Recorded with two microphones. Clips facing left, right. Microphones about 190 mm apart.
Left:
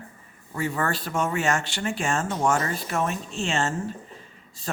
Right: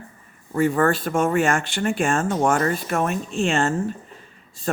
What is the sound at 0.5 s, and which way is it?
Speech, 50° right (ahead or behind).